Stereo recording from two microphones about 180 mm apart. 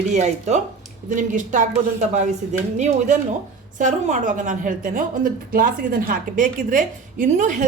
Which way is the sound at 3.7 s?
40° right (ahead or behind).